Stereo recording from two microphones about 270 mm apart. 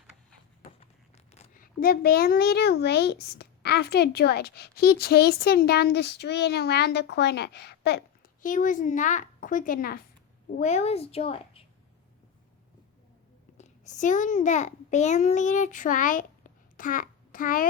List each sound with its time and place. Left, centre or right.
0.8 s speech: left
13.6 s a child's voice: left